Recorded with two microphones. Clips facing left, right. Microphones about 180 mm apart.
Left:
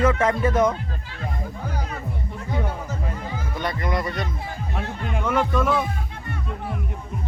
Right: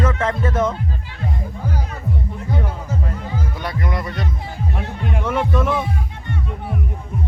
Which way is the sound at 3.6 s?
5° right (ahead or behind).